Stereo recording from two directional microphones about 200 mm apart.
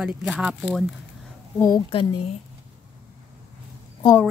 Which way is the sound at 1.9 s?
25° left (ahead or behind).